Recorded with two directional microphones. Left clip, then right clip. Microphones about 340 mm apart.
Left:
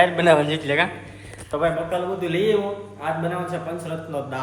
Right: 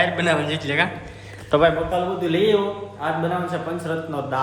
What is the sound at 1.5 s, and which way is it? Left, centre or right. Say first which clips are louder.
Speech: right 6 dB; right.